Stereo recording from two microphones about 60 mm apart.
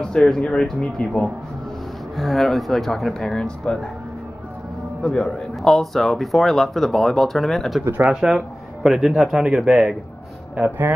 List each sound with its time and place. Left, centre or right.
0.0 s speech: centre
2.1 s speech: centre
5.0 s speech: centre
8.0 s speech: centre
10.5 s speech: right